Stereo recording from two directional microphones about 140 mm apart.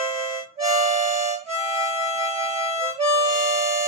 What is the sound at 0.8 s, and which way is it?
Harmonica, 55° right (ahead or behind).